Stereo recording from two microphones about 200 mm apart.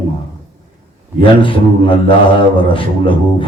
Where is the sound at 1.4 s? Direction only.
25° left (ahead or behind).